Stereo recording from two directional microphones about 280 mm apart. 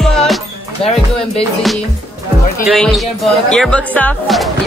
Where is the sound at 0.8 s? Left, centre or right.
Left.